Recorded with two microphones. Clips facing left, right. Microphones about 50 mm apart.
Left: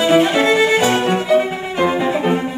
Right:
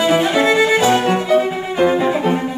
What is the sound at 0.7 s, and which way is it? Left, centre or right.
Violin, left.